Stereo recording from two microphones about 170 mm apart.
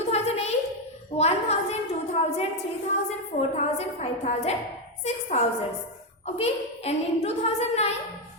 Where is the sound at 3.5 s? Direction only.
40° left (ahead or behind).